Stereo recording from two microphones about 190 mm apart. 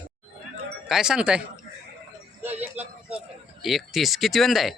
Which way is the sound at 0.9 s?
5° right (ahead or behind).